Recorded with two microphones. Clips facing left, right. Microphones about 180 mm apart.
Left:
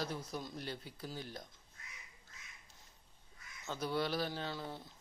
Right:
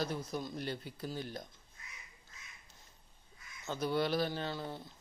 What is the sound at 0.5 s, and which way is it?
Speech, 60° right (ahead or behind).